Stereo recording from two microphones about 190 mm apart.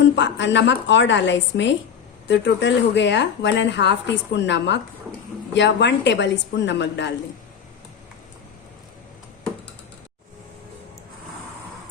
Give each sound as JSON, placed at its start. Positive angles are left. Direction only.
{"t": 0.2, "sound": "a woman's voice", "side_deg": 70}